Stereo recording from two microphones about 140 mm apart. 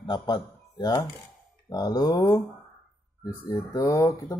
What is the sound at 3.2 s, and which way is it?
Speech, 15° left (ahead or behind).